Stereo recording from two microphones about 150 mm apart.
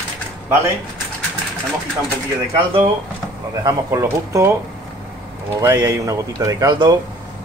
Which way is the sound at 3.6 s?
20° right (ahead or behind).